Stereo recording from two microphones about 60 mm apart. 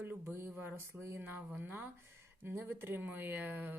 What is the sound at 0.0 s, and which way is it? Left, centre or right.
Speech, right.